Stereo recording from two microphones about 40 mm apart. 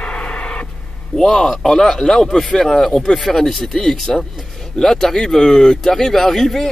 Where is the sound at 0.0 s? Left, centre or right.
Left.